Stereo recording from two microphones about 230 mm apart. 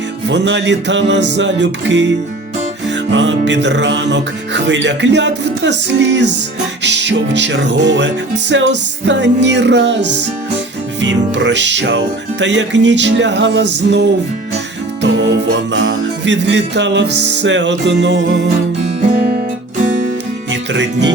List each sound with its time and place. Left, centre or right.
0.3 s music: right
3.1 s music: right
20.5 s music: right